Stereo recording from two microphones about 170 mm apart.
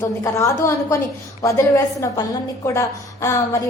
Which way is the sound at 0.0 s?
15° left (ahead or behind).